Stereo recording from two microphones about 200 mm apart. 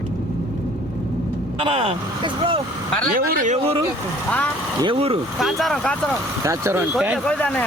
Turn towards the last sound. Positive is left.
turn(degrees=5)  # may be behind; listen again after turning